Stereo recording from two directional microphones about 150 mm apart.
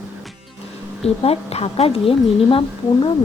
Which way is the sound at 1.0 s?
40° left (ahead or behind).